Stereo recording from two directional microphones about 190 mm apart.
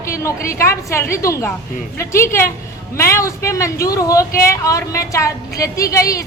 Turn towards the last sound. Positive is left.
turn(degrees=15)  # may be behind; listen again after turning